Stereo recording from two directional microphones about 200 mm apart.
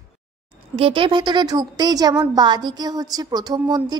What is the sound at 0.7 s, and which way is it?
A woman's voice, 25° right (ahead or behind).